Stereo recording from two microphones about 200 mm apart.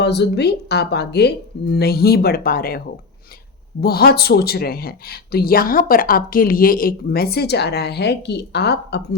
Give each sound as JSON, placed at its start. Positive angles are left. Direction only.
{"t": 0.0, "sound": "speech", "side_deg": 55}